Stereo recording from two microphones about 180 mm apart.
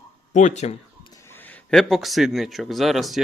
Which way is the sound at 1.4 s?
Centre (ahead or behind).